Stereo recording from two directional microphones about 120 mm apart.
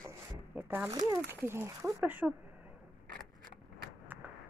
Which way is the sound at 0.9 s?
30° right (ahead or behind).